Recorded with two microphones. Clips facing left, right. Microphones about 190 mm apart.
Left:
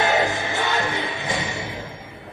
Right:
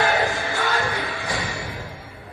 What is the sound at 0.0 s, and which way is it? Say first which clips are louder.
Music: left 1 dB; 20° left (ahead or behind).